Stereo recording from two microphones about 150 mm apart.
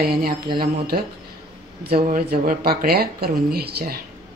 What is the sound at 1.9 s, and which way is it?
Speech, 80° right.